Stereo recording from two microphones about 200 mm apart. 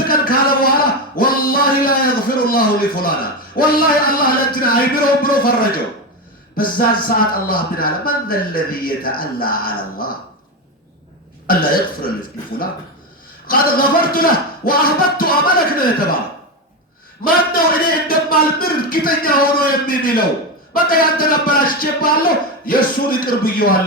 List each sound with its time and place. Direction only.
0.1 s a sound: 45° left (ahead or behind)
6.6 s speech: 45° left (ahead or behind)
11.4 s speech: 45° left (ahead or behind)
13.5 s speech: 45° left (ahead or behind)
17.2 s speech: 45° left (ahead or behind)